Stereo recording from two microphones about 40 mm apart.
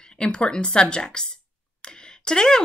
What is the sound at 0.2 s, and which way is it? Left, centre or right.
A woman's voice, left.